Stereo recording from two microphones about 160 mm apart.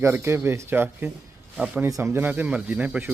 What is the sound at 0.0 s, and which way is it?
Speech, 15° right (ahead or behind).